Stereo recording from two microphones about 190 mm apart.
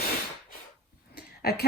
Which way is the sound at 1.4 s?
55° left (ahead or behind).